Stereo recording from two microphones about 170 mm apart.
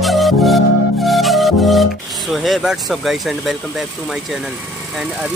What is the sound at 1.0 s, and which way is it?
Speech, centre (ahead or behind).